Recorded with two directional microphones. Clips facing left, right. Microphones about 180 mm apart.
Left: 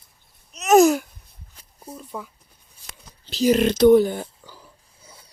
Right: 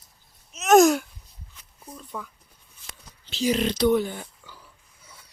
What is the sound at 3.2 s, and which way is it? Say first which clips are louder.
Speech: left 6 dB; 40° left (ahead or behind).